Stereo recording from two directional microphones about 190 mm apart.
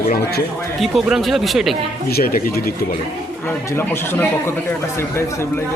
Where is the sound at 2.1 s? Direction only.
55° left (ahead or behind).